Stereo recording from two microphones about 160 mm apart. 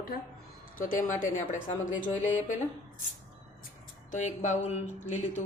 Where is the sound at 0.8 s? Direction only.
55° left (ahead or behind).